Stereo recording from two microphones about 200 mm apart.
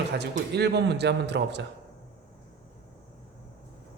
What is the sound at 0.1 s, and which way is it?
Speech, 55° right (ahead or behind).